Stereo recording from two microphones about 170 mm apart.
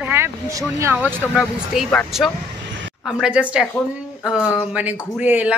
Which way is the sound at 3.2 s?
5° right (ahead or behind).